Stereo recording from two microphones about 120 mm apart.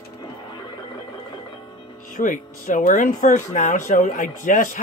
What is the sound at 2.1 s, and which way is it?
Speech, 90° left.